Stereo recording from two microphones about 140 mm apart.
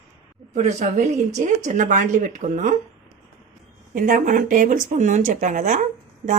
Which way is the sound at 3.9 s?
80° right.